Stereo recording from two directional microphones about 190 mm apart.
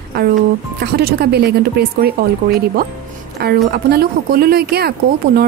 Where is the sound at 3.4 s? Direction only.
55° right (ahead or behind).